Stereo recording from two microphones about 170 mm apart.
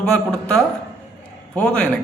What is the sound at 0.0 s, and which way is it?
A man's voice, 5° left (ahead or behind).